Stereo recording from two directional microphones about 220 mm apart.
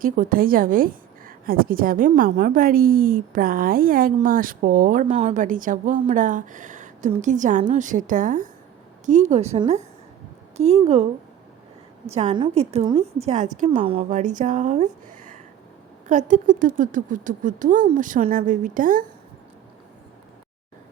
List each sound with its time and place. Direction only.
0.0 s a woman's voice: 40° right (ahead or behind)
12.1 s a woman's voice: 25° right (ahead or behind)
16.0 s a woman's voice: 35° right (ahead or behind)